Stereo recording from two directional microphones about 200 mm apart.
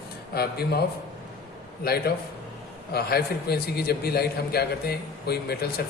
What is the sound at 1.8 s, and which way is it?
A man's voice, 50° left (ahead or behind).